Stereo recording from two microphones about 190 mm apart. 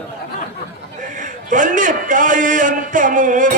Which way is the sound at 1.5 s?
45° right (ahead or behind).